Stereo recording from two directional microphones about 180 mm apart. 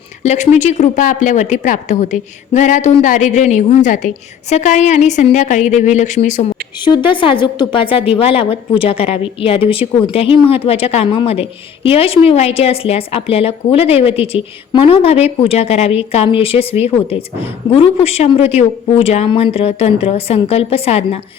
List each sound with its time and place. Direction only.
0.2 s a woman's voice: 40° left (ahead or behind)
6.8 s a woman's voice: 25° left (ahead or behind)